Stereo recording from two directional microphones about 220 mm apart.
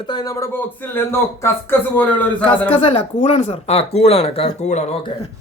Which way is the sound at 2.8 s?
25° left (ahead or behind).